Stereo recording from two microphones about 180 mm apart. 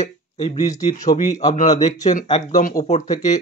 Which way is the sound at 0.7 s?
20° left (ahead or behind).